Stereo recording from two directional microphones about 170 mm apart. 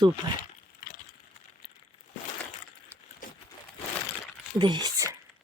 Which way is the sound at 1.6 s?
30° left (ahead or behind).